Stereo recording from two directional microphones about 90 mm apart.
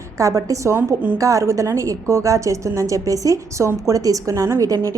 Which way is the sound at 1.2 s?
40° right (ahead or behind).